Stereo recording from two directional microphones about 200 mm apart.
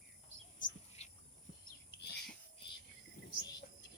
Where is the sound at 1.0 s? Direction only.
35° left (ahead or behind).